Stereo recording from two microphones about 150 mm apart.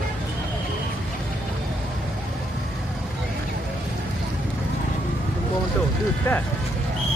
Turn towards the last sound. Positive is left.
turn(degrees=15)  # may be behind; listen again after turning